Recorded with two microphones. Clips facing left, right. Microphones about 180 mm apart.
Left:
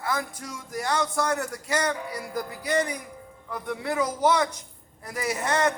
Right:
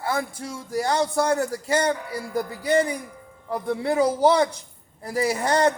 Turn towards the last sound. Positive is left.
turn(degrees=-30)  # may be behind; listen again after turning